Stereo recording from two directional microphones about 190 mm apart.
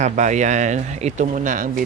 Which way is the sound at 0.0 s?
40° right (ahead or behind).